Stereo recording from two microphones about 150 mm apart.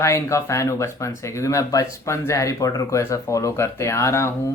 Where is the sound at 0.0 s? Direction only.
20° left (ahead or behind).